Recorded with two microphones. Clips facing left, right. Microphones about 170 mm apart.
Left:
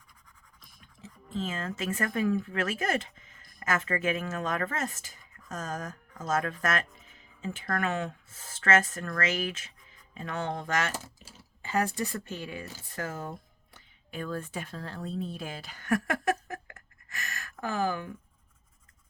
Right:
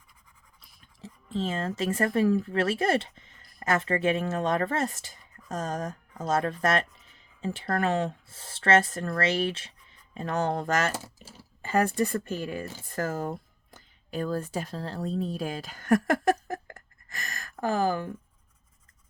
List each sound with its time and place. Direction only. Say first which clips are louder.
1.0 s speech: right 4 dB; 35° right (ahead or behind)
11.6 s speech: right 5 dB; 50° right (ahead or behind); by 18.1 s 35° right (ahead or behind)